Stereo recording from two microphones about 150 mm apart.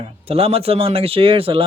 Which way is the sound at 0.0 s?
40° right (ahead or behind).